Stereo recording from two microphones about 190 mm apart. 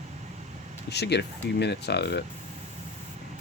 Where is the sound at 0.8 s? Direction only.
60° left (ahead or behind).